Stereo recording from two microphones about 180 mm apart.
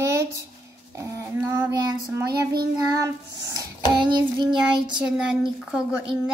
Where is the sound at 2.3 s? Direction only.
60° right (ahead or behind).